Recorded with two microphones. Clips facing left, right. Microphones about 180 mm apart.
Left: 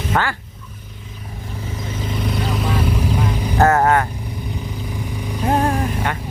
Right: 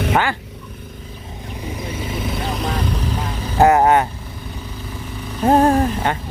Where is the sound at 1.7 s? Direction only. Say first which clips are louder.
Even; 10° right (ahead or behind); by 3.6 s 15° left (ahead or behind).